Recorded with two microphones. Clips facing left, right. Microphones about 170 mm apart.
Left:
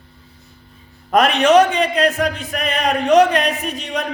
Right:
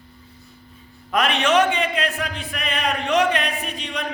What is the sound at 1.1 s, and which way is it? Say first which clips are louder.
A man's voice: left 7 dB; 40° left (ahead or behind).